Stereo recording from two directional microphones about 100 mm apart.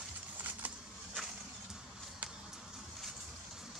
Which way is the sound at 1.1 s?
5° right (ahead or behind).